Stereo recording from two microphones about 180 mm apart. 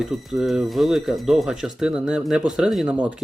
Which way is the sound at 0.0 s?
Centre (ahead or behind).